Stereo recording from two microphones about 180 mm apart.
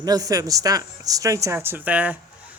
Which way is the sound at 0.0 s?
20° right (ahead or behind).